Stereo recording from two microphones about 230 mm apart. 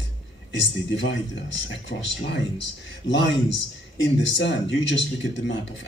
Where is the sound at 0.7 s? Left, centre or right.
Left.